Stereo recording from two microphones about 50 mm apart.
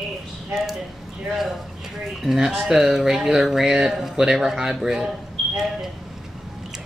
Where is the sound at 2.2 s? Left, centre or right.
Centre.